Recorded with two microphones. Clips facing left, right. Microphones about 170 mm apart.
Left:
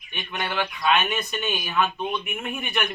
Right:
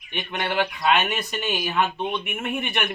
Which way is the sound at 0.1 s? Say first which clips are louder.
Right 3 dB; 20° right (ahead or behind).